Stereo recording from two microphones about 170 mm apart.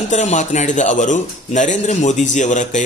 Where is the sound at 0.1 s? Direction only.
45° left (ahead or behind).